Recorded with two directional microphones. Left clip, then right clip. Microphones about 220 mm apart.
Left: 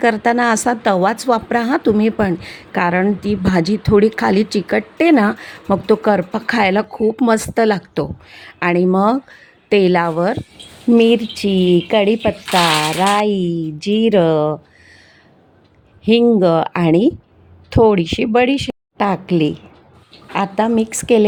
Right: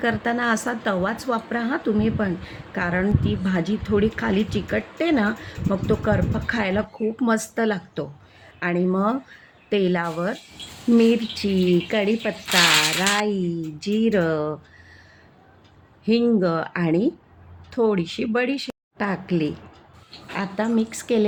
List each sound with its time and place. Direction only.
0.0 s a woman's voice: 40° left (ahead or behind)
16.0 s speech: 35° left (ahead or behind)